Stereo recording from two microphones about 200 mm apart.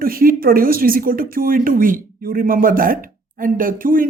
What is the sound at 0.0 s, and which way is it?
Speech, 45° right (ahead or behind).